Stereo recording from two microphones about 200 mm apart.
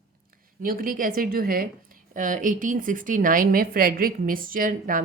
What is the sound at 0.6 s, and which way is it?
A woman's voice, 45° right (ahead or behind).